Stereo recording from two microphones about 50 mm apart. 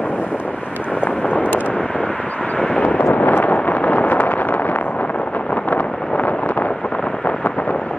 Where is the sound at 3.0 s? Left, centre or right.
Left.